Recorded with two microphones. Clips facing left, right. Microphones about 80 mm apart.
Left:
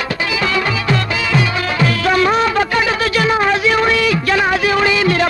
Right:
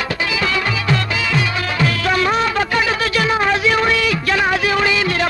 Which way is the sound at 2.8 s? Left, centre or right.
Left.